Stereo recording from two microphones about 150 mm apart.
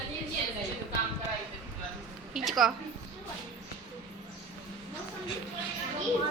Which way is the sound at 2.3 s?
Centre (ahead or behind).